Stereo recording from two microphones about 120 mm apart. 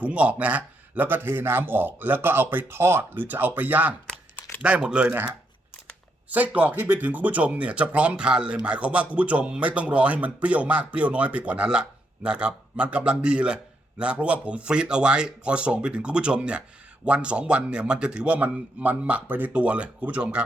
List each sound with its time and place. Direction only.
0.0 s speech: 10° right (ahead or behind)
6.3 s speech: 10° right (ahead or behind)